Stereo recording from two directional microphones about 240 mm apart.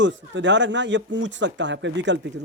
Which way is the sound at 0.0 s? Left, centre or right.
Right.